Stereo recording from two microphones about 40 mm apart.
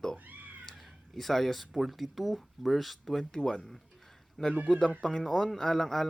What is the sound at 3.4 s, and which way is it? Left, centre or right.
Speech, centre.